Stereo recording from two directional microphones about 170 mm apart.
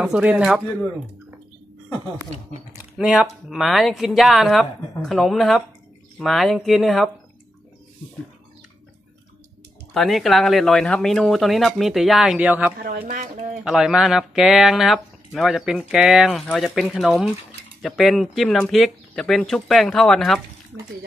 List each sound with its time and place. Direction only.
0.0 s speech: 5° right (ahead or behind)
2.8 s speech: 5° right (ahead or behind)
9.9 s speech: centre (ahead or behind)
12.7 s speech: 60° right (ahead or behind)
13.7 s speech: 5° right (ahead or behind)